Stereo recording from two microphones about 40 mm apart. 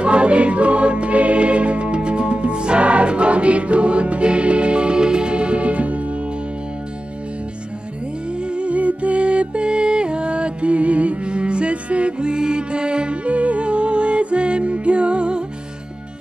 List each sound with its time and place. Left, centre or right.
0.0 s music: right
8.4 s music: right